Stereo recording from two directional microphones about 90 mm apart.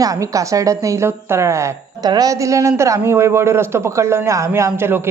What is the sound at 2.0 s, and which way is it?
Speech, 45° right (ahead or behind).